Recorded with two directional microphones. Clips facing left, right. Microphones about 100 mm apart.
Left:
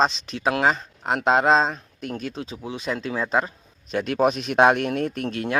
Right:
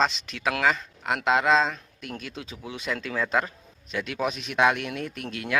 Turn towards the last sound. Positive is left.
turn(degrees=35)  # may be behind; listen again after turning